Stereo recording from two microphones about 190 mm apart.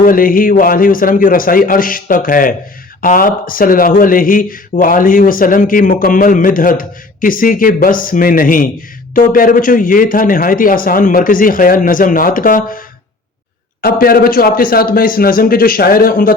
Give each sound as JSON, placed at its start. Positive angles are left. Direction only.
{"t": 0.0, "sound": "speech", "side_deg": 45}
{"t": 13.8, "sound": "speech", "side_deg": 50}